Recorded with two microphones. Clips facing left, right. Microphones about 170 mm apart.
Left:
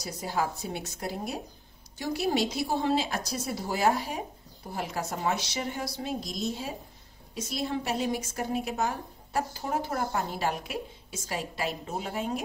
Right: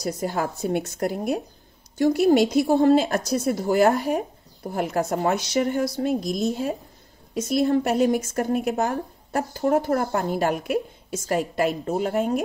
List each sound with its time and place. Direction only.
0.0 s speech: 50° right (ahead or behind)